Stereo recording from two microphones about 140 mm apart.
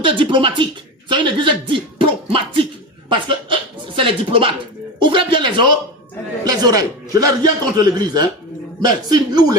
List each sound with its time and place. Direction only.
0.1 s a woman's voice: 35° right (ahead or behind)